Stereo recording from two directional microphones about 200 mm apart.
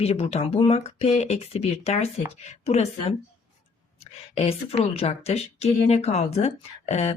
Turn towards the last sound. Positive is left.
turn(degrees=35)  # may be behind; listen again after turning